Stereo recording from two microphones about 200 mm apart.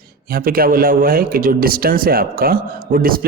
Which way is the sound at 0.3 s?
45° right (ahead or behind).